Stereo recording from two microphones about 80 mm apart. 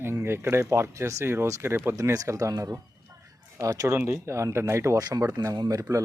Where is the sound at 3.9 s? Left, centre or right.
Right.